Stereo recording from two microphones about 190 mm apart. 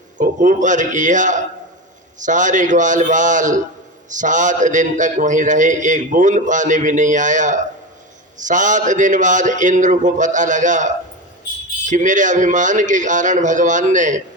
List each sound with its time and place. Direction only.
0.2 s a man's voice: 45° right (ahead or behind)